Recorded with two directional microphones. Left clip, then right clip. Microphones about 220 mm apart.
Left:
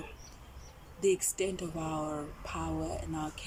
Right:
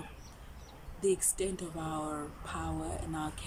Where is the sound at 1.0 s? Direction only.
5° left (ahead or behind).